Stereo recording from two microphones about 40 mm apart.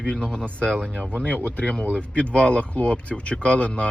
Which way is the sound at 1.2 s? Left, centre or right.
Left.